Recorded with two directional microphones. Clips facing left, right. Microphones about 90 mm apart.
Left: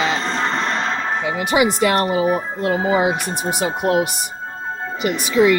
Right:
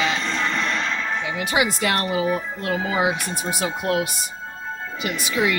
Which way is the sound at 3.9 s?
40° left (ahead or behind).